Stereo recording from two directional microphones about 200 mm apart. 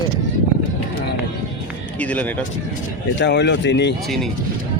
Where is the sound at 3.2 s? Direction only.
60° left (ahead or behind).